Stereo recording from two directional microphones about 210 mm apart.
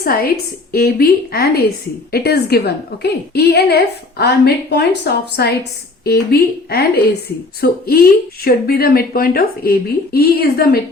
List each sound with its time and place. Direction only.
0.0 s a woman's voice: 45° left (ahead or behind)